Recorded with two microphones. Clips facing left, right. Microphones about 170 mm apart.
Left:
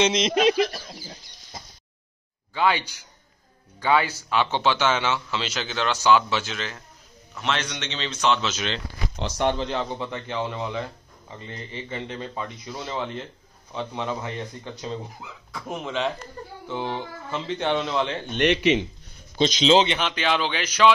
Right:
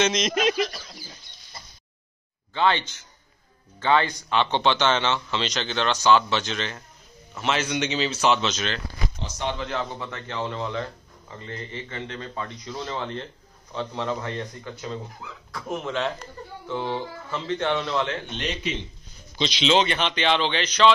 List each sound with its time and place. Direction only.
0.0 s speech: 30° left (ahead or behind)
2.5 s speech: 10° left (ahead or behind)
3.8 s a man's voice: 10° left (ahead or behind)
8.5 s speech: 10° left (ahead or behind)
9.2 s speech: 55° left (ahead or behind)
9.6 s speech: 20° left (ahead or behind)
16.6 s speech: 15° left (ahead or behind)
18.3 s speech: 65° left (ahead or behind)
19.3 s speech: 45° left (ahead or behind)
20.0 s speech: 5° left (ahead or behind)